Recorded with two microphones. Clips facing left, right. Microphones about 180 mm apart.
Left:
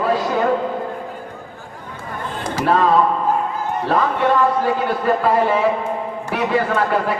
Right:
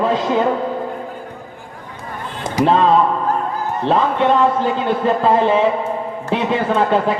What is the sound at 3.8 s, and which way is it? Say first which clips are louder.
A man's voice: right 3 dB; 25° right (ahead or behind).